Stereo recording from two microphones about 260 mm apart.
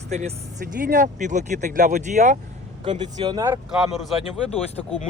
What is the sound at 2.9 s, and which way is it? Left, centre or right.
Speech, centre.